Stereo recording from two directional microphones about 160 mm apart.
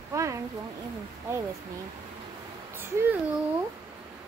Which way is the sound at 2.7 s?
15° right (ahead or behind).